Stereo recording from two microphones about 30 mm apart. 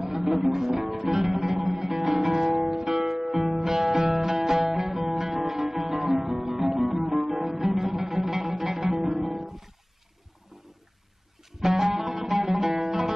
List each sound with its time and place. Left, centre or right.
0.0 s music: centre
11.6 s music: centre